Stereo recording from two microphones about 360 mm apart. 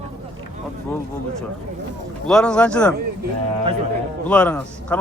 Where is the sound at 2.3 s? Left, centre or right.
Centre.